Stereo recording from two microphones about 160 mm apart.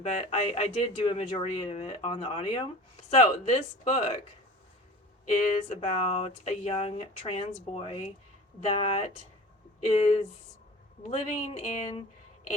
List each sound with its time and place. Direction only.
0.0 s speech: 45° left (ahead or behind)
5.6 s speech: 45° left (ahead or behind)